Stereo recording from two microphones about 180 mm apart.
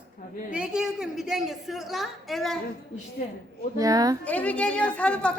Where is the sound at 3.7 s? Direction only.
20° right (ahead or behind).